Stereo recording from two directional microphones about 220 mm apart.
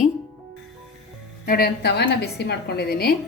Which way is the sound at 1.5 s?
45° left (ahead or behind).